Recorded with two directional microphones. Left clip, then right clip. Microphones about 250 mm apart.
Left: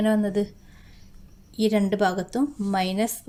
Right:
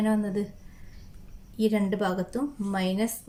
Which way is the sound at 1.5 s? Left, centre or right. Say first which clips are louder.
Left 4 dB; left.